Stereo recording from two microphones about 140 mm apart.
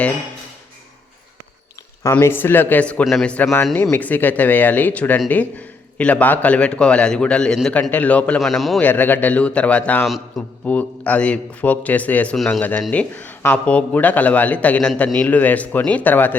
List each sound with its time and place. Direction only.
2.1 s a man's voice: 15° left (ahead or behind)
8.8 s a man's voice: 15° left (ahead or behind)
10.1 s a man's voice: centre (ahead or behind)
10.7 s a man's voice: 10° left (ahead or behind)